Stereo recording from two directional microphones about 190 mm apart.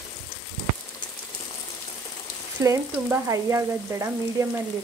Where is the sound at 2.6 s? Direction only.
15° right (ahead or behind).